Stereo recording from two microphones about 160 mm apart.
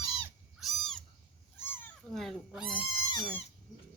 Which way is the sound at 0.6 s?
Centre (ahead or behind).